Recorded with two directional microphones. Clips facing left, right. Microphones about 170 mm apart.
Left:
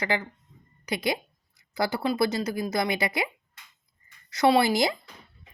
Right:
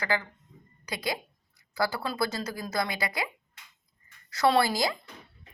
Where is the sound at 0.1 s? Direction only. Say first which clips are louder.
Left 1 dB; 20° left (ahead or behind).